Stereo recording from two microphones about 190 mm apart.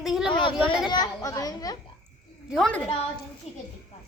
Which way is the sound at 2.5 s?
5° left (ahead or behind).